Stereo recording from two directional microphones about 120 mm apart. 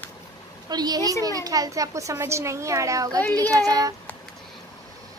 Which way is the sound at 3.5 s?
30° right (ahead or behind).